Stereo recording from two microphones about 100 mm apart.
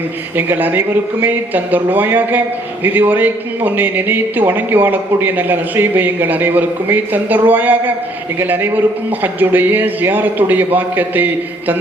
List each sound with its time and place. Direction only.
0.3 s a man's voice: 20° right (ahead or behind)